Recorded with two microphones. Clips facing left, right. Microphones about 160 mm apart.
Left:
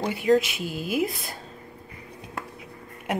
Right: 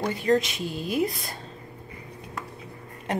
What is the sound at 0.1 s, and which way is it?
Speech, 5° left (ahead or behind).